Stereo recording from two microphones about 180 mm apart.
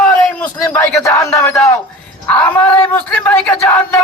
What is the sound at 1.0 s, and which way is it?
Speech, 20° left (ahead or behind).